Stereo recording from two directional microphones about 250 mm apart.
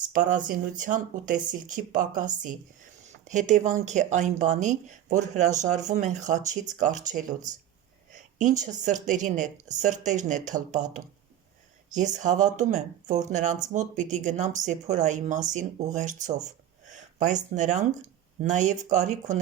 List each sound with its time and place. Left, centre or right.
0.4 s a woman's voice: right
11.9 s speech: right